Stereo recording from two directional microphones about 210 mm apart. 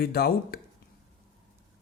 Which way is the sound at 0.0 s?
45° left (ahead or behind).